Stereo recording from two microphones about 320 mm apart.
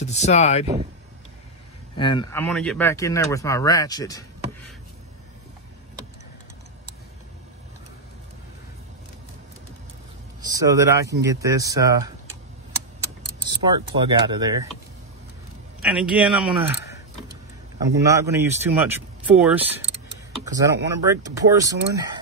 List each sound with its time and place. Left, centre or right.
0.0 s speech: left
2.0 s speech: centre
10.4 s speech: centre
13.5 s speech: centre
15.8 s speech: centre
18.0 s speech: centre